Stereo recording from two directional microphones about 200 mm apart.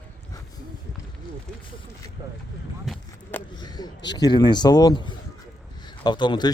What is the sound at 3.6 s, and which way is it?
Speech, 20° left (ahead or behind).